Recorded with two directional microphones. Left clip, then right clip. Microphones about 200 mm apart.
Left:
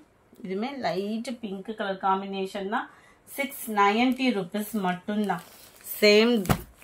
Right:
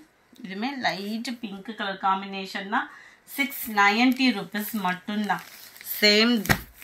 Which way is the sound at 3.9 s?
50° left (ahead or behind).